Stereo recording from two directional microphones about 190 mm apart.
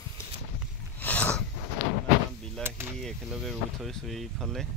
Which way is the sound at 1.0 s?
10° left (ahead or behind).